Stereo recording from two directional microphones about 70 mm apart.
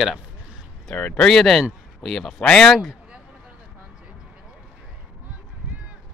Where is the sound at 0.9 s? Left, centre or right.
Left.